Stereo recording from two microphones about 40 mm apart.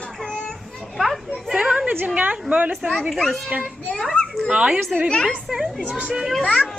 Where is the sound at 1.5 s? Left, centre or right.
Centre.